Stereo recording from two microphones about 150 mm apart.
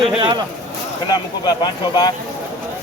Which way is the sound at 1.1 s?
25° left (ahead or behind).